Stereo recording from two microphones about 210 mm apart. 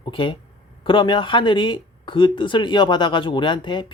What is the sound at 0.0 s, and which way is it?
Speech, 25° left (ahead or behind).